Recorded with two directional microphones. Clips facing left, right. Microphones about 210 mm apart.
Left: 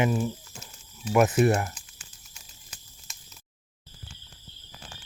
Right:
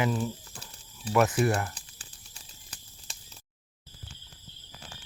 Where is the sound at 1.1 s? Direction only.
20° left (ahead or behind).